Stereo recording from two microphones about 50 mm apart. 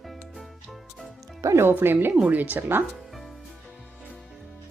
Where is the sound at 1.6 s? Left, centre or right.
Right.